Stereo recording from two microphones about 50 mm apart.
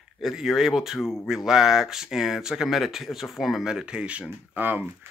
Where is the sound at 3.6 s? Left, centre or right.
Centre.